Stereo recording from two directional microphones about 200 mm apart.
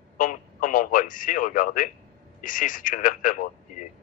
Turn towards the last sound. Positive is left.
turn(degrees=40)  # may be behind; listen again after turning